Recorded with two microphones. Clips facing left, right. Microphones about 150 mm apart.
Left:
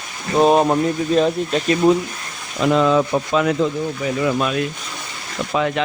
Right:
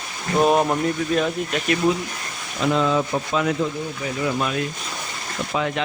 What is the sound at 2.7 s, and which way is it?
Speech, 85° left.